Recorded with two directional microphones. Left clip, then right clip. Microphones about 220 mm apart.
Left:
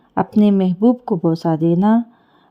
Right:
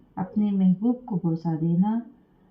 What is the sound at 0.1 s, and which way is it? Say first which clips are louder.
Speech: left 13 dB; 45° left (ahead or behind).